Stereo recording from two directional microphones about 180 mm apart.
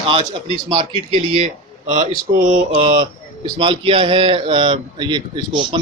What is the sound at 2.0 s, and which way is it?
Speech, 50° right (ahead or behind).